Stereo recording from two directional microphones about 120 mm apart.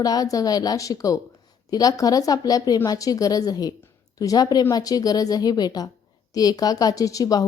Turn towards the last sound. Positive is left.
turn(degrees=30)  # may be behind; listen again after turning